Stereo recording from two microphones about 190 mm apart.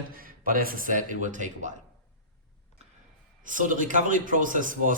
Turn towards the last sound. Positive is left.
turn(degrees=-45)  # may be behind; listen again after turning